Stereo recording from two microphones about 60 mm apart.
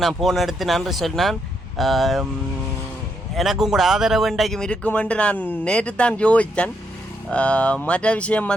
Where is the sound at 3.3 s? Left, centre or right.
Centre.